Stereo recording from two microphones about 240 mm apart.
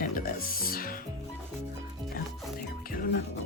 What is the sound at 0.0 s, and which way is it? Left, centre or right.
Music, left.